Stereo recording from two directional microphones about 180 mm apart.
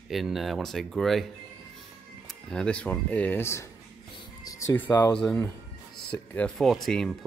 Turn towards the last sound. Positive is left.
turn(degrees=5)  # may be behind; listen again after turning